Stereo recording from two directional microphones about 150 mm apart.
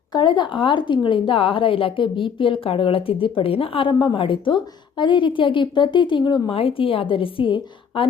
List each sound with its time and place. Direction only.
0.1 s a woman's voice: 30° left (ahead or behind)